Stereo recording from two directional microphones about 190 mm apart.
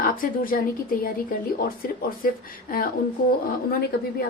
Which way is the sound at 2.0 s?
50° left (ahead or behind).